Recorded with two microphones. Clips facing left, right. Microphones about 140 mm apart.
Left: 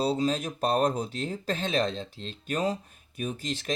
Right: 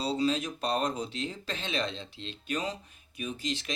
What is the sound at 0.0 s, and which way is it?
Speech, 45° left (ahead or behind).